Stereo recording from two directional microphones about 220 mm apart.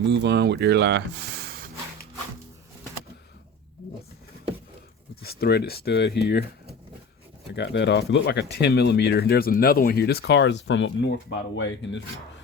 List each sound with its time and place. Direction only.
0.0 s speech: 50° right (ahead or behind)
5.2 s speech: 45° left (ahead or behind)
7.5 s speech: 50° left (ahead or behind)